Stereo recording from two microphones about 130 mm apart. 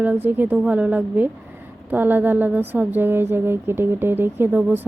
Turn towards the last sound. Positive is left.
turn(degrees=-15)  # may be behind; listen again after turning